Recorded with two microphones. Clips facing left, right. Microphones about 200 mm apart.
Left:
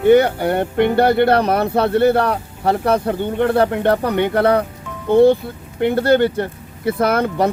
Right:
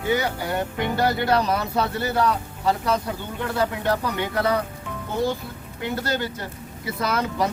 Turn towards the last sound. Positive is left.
turn(degrees=60)  # may be behind; listen again after turning